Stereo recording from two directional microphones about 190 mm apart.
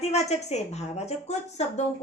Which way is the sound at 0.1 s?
35° left (ahead or behind).